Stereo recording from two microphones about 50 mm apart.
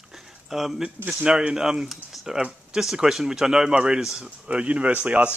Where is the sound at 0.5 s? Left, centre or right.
Centre.